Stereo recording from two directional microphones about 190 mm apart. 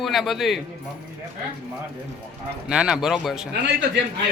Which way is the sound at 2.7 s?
5° right (ahead or behind).